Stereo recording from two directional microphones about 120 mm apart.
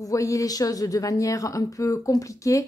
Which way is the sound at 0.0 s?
25° left (ahead or behind).